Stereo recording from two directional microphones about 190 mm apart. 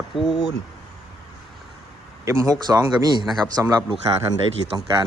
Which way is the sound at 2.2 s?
15° right (ahead or behind).